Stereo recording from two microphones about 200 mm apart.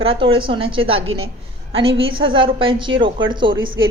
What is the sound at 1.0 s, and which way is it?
Speech, 90° right.